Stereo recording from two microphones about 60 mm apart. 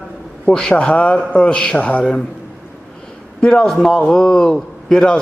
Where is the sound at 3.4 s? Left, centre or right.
Centre.